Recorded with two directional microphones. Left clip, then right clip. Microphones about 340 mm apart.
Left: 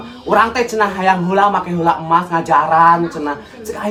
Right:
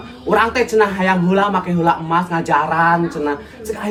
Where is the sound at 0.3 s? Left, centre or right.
Centre.